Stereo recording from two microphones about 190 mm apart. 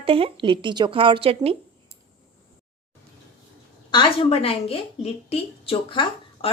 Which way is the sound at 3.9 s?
25° left (ahead or behind).